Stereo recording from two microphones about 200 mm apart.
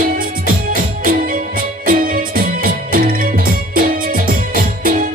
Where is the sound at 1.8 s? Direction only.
45° right (ahead or behind).